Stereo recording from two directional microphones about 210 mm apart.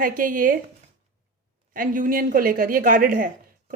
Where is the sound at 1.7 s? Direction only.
40° right (ahead or behind).